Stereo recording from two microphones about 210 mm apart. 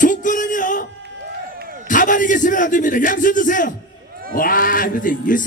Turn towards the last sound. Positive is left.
turn(degrees=40)  # may be behind; listen again after turning